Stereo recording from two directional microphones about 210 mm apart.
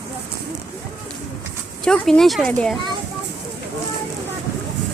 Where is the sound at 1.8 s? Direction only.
5° left (ahead or behind).